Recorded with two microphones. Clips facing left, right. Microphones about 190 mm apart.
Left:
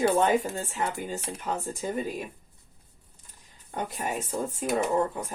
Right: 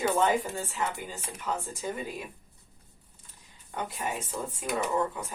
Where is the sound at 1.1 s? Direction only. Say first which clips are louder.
Left 3 dB; 40° left (ahead or behind).